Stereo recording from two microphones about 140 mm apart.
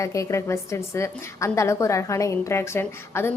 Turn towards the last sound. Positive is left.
turn(degrees=15)  # may be behind; listen again after turning